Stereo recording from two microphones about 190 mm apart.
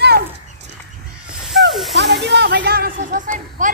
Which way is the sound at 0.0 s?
60° right (ahead or behind).